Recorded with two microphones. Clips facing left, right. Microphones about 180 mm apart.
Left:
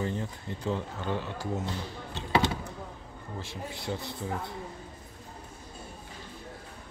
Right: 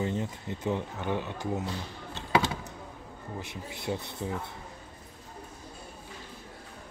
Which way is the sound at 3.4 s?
20° right (ahead or behind).